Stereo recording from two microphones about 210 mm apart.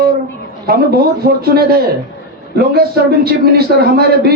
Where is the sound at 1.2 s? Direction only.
45° right (ahead or behind).